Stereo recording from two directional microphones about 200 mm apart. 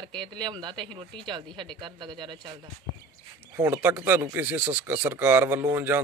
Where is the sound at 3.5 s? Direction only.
10° right (ahead or behind).